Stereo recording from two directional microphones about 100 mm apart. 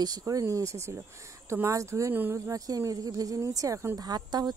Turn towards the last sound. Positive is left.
turn(degrees=-45)  # may be behind; listen again after turning